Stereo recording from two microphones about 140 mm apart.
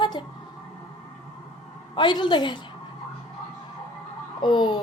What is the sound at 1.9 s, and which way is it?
Speech, 35° left (ahead or behind).